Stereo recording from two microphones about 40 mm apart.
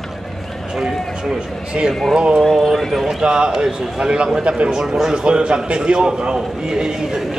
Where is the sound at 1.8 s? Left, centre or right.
Right.